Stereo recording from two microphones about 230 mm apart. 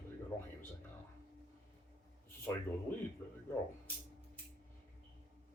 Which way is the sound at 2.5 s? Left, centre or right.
Centre.